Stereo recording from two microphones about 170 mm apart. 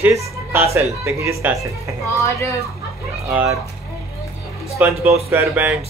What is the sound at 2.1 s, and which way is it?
Speech, 15° left (ahead or behind).